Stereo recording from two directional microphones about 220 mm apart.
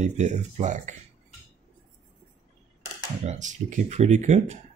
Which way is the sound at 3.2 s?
35° right (ahead or behind).